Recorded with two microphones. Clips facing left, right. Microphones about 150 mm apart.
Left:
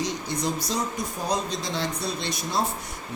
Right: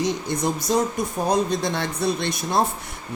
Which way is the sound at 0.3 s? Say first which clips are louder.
Right 6 dB; 55° right (ahead or behind).